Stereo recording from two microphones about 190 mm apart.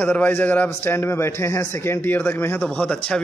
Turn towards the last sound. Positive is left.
turn(degrees=5)  # may be behind; listen again after turning